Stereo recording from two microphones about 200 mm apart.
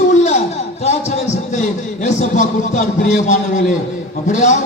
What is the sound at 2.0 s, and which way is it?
A man's voice, 35° left (ahead or behind).